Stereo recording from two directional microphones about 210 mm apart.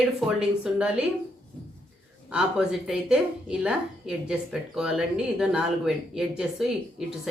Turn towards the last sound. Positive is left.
turn(degrees=0)  # may be behind; listen again after turning